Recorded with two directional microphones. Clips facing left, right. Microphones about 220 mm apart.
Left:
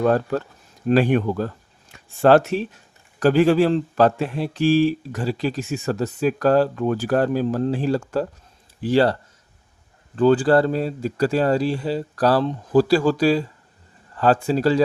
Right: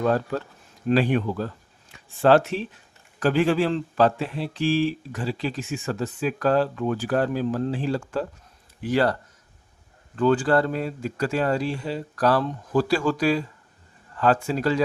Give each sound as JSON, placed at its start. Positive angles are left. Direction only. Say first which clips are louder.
{"t": 0.0, "sound": "speech", "louder": "left 4 dB", "side_deg": 45}
{"t": 8.8, "sound": "speech", "louder": "left 4 dB", "side_deg": 30}
{"t": 10.2, "sound": "speech", "louder": "left 4 dB", "side_deg": 35}